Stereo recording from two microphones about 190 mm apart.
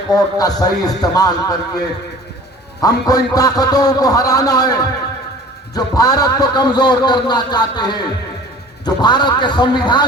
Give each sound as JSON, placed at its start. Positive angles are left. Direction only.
{"t": 0.1, "sound": "a man's voice", "side_deg": 20}
{"t": 2.8, "sound": "a man's voice", "side_deg": 20}